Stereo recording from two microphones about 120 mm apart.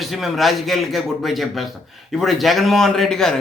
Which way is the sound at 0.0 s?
Centre (ahead or behind).